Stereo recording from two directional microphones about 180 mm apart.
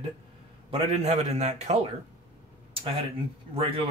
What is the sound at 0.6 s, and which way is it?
Speech, 35° right (ahead or behind).